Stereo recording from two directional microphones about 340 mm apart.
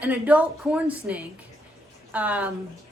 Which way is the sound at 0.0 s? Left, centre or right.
Centre.